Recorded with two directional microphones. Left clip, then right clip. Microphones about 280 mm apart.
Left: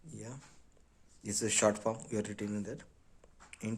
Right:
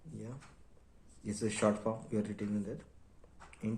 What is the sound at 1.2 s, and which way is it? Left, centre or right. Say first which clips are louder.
A man's voice: left 3 dB; left.